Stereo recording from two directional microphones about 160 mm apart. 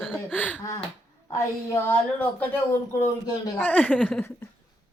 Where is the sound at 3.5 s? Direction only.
5° left (ahead or behind).